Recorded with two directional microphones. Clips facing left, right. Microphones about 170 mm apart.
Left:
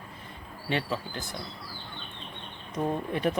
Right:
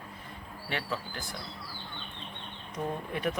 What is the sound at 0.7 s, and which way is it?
Speech, 20° left (ahead or behind).